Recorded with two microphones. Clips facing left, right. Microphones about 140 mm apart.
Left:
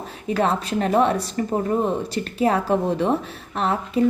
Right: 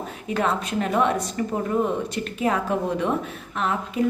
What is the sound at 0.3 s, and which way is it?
A woman's voice, 35° left (ahead or behind).